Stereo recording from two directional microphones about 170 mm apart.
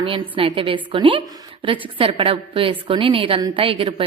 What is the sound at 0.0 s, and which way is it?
A woman's voice, 30° right (ahead or behind).